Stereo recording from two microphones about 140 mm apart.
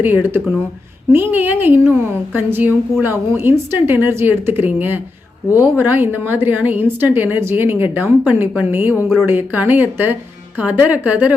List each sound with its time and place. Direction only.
0.0 s a woman's voice: 15° right (ahead or behind)